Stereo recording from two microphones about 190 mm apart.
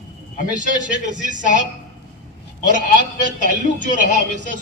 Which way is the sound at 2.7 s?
40° right (ahead or behind).